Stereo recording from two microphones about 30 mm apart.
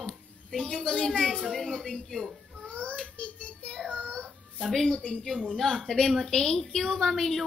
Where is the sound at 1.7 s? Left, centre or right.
Left.